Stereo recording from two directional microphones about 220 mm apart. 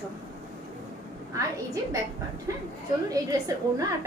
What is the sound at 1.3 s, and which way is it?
Speech, 15° right (ahead or behind).